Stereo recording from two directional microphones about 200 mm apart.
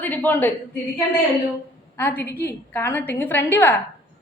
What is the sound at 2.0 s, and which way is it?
A woman's voice, 10° left (ahead or behind).